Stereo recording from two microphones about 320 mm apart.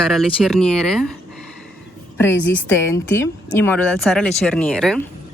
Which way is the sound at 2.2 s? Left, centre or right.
Centre.